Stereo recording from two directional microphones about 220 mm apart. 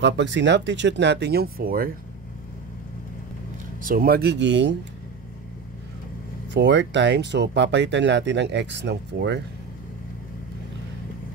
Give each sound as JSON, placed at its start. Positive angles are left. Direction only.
{"t": 0.0, "sound": "speech", "side_deg": -55}
{"t": 3.8, "sound": "speech", "side_deg": -40}
{"t": 6.5, "sound": "speech", "side_deg": -55}